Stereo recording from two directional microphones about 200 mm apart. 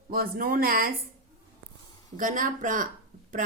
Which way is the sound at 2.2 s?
40° right (ahead or behind).